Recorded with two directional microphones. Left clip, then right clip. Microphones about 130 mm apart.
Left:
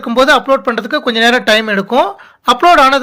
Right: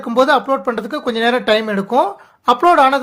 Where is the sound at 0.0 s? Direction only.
20° left (ahead or behind).